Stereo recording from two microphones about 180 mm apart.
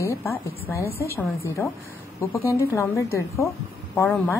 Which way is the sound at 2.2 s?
15° left (ahead or behind).